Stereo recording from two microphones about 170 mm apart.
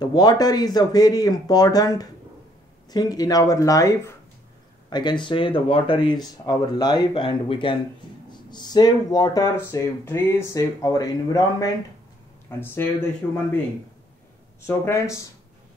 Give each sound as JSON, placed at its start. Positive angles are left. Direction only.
{"t": 0.0, "sound": "speech", "side_deg": 25}
{"t": 4.8, "sound": "a sound", "side_deg": 25}
{"t": 5.2, "sound": "speech", "side_deg": 30}
{"t": 14.7, "sound": "speech", "side_deg": 15}